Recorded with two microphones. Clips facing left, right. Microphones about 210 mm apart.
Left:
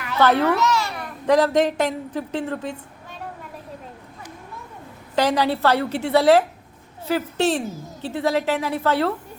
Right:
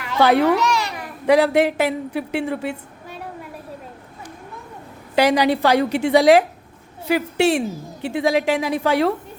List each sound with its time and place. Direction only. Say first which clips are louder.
0.1 s a child's voice: right 3 dB; 10° right (ahead or behind)
5.1 s a woman's voice: right 4 dB; 10° right (ahead or behind)